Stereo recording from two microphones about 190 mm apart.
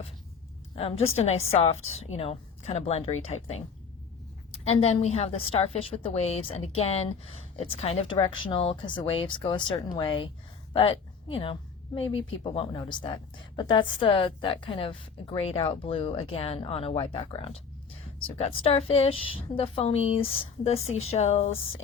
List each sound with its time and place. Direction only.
0.8 s a woman's voice: 30° left (ahead or behind)
4.5 s a woman's voice: 35° left (ahead or behind)